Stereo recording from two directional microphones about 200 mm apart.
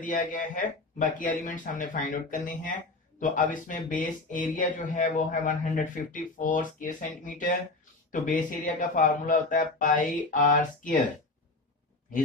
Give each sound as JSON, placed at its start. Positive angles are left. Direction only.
{"t": 0.0, "sound": "speech", "side_deg": 40}